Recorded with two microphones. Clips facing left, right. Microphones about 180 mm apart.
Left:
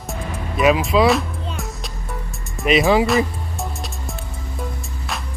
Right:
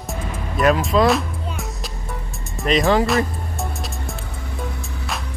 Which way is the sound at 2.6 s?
Centre (ahead or behind).